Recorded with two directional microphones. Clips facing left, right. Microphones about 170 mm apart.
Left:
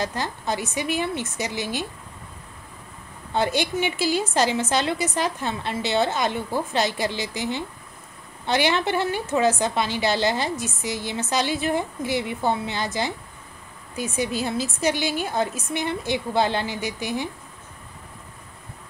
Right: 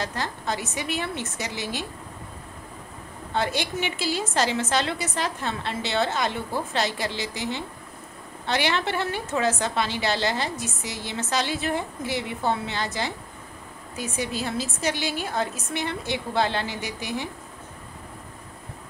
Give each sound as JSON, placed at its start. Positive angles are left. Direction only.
{"t": 0.0, "sound": "a woman's voice", "side_deg": 15}
{"t": 3.3, "sound": "a woman's voice", "side_deg": 15}